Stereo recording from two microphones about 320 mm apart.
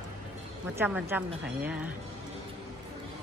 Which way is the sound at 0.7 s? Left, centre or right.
Centre.